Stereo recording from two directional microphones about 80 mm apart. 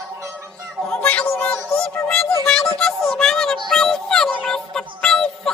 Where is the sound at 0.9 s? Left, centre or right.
Centre.